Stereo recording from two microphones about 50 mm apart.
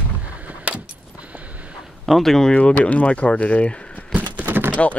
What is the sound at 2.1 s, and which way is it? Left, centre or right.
Speech, centre.